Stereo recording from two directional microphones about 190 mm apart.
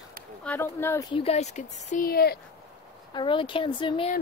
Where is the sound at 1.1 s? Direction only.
35° left (ahead or behind); by 2.3 s 55° left (ahead or behind).